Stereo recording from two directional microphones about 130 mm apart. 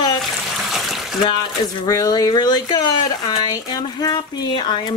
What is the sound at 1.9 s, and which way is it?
Speech, 30° left (ahead or behind).